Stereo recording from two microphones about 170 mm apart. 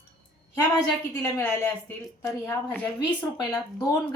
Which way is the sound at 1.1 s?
15° left (ahead or behind).